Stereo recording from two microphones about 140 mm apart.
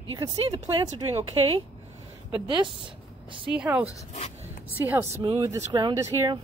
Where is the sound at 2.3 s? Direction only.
35° right (ahead or behind).